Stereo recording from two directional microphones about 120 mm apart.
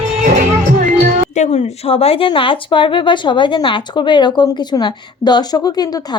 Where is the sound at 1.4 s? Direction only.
60° left (ahead or behind).